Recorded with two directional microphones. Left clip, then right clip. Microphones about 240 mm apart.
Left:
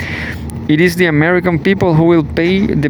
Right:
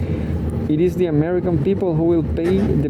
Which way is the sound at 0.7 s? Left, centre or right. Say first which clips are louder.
Left 7 dB; left.